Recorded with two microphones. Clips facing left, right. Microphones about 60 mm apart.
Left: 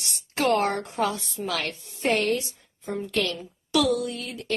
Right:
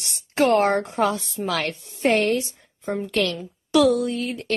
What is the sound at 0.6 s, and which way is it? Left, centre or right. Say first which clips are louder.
A woman's voice: right 5 dB; right.